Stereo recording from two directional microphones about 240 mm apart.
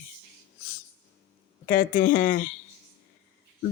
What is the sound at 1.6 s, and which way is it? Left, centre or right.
Speech, left.